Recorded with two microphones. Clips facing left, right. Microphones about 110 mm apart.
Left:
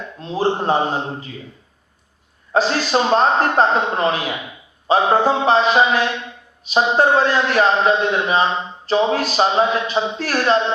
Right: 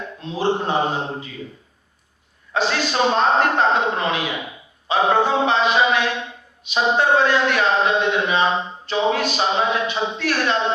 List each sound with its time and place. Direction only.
0.2 s a man's voice: 35° left (ahead or behind)
2.5 s a man's voice: 35° left (ahead or behind)